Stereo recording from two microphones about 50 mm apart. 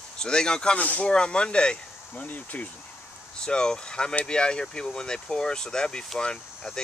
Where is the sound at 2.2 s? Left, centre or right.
Left.